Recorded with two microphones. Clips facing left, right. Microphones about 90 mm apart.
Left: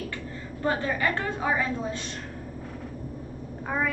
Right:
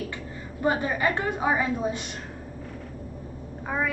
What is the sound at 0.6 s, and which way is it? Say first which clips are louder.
A woman's voice: right 2 dB; 15° right (ahead or behind).